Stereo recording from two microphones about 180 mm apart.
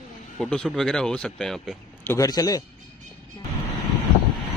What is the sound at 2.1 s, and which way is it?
Speech, 20° left (ahead or behind).